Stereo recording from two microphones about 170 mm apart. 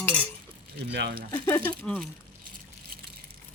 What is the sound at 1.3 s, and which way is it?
Speech, 15° left (ahead or behind).